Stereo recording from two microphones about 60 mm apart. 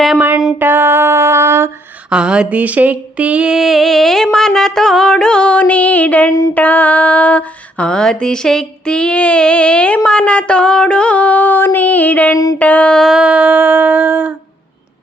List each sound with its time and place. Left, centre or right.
0.6 s music: right
2.0 s speech: centre
3.5 s music: centre; by 6.3 s left
6.5 s mantra: left
13.1 s speech: centre